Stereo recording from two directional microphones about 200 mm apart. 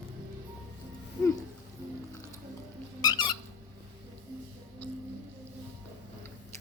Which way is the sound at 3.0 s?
20° left (ahead or behind).